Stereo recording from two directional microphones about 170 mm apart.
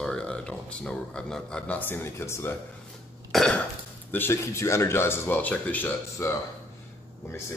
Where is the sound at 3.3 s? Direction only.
Centre (ahead or behind).